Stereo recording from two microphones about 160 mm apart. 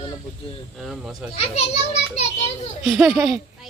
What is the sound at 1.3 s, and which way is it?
Speech, 40° left (ahead or behind).